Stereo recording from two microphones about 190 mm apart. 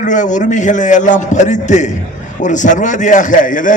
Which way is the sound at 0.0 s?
40° left (ahead or behind).